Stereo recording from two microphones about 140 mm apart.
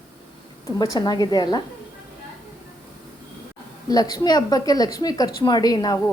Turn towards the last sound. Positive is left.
turn(degrees=25)  # may be behind; listen again after turning